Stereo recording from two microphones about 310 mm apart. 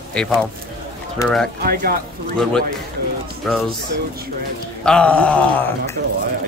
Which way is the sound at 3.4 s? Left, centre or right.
Centre.